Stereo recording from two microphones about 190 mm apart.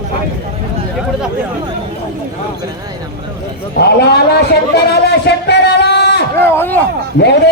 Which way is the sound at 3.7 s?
60° left (ahead or behind).